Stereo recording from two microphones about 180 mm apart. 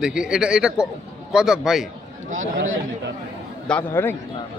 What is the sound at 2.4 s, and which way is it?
Speech, 90° right.